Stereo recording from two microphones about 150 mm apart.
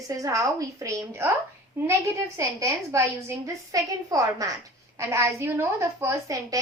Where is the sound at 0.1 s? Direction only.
20° right (ahead or behind).